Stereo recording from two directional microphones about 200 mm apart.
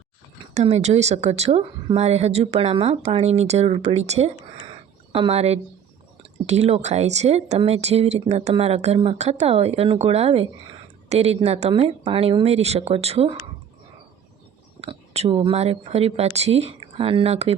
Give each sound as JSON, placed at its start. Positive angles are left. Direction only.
{"t": 0.5, "sound": "speech", "side_deg": -35}
{"t": 14.8, "sound": "speech", "side_deg": -30}